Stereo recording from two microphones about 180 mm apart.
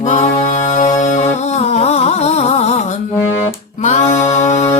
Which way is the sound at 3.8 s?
40° left (ahead or behind).